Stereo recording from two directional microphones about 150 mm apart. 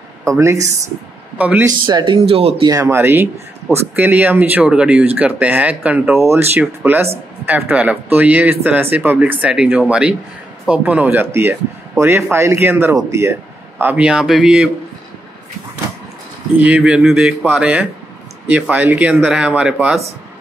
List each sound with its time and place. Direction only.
0.4 s speech: 20° right (ahead or behind)
1.4 s speech: 10° right (ahead or behind)
1.7 s speech: 30° right (ahead or behind)
2.1 s speech: 40° right (ahead or behind)
2.7 s speech: 20° right (ahead or behind)
16.5 s speech: 10° right (ahead or behind)